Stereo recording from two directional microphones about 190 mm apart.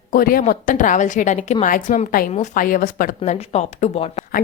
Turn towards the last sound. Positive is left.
turn(degrees=35)  # may be behind; listen again after turning